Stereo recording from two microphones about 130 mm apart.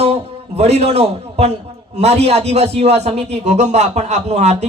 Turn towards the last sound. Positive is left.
turn(degrees=-60)  # may be behind; listen again after turning